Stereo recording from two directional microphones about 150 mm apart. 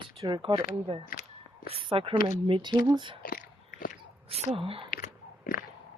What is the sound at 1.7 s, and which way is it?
A woman's voice, 35° right (ahead or behind).